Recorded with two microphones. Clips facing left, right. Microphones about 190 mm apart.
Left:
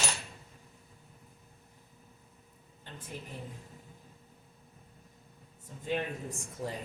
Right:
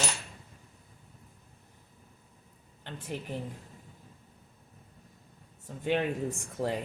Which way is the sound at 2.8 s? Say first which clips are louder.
Right 6 dB; 75° right (ahead or behind).